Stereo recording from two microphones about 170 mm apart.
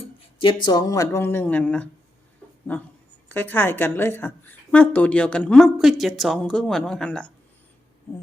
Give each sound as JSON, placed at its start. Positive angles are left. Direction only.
{"t": 0.0, "sound": "speech", "side_deg": 30}
{"t": 3.2, "sound": "a woman's voice", "side_deg": 10}